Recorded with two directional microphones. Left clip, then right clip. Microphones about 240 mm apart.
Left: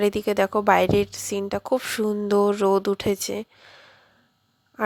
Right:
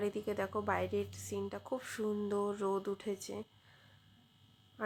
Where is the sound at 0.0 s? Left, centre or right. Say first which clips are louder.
Left 16 dB; left.